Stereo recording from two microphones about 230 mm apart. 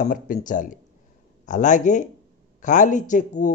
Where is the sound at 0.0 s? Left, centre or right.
Left.